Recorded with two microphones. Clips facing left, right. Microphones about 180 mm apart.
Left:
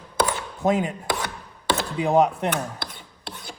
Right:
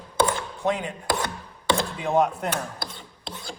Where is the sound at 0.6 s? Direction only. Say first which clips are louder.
Left 5 dB; 45° left (ahead or behind).